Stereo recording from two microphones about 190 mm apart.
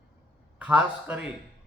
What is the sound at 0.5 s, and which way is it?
Speech, 5° right (ahead or behind).